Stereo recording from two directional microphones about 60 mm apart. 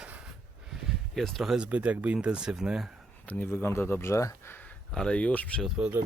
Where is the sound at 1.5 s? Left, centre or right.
Right.